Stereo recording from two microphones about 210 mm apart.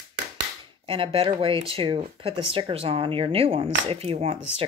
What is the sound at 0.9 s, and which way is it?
Speech, 25° right (ahead or behind).